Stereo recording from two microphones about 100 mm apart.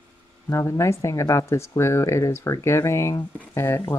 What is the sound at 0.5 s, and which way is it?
Speech, 30° left (ahead or behind).